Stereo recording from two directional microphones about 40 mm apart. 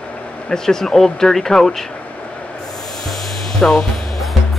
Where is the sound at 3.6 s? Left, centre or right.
Centre.